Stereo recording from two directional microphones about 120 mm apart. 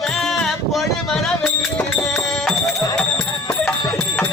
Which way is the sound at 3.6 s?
5° left (ahead or behind).